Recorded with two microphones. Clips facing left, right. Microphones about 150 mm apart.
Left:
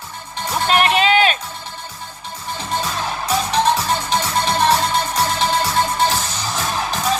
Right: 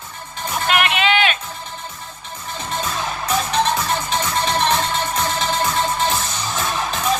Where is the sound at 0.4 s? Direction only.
35° left (ahead or behind).